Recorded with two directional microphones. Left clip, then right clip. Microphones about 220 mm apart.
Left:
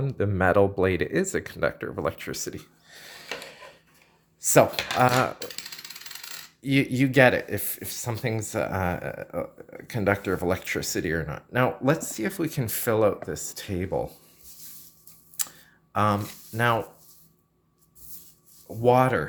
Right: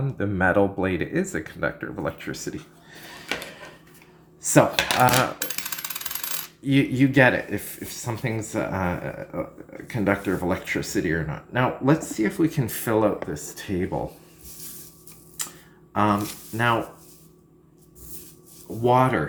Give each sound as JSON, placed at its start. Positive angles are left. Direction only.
{"t": 0.0, "sound": "speech", "side_deg": 45}
{"t": 4.4, "sound": "speech", "side_deg": 50}
{"t": 6.6, "sound": "speech", "side_deg": 50}
{"t": 15.4, "sound": "a sound", "side_deg": 55}
{"t": 15.9, "sound": "speech", "side_deg": 55}
{"t": 18.8, "sound": "speech", "side_deg": 55}